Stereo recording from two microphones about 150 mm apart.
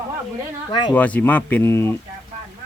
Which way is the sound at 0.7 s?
30° left (ahead or behind).